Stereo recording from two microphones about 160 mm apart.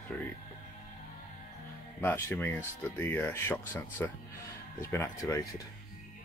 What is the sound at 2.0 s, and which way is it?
Speech, 15° left (ahead or behind).